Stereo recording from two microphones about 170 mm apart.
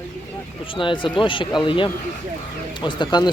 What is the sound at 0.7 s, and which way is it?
Speech, 30° left (ahead or behind).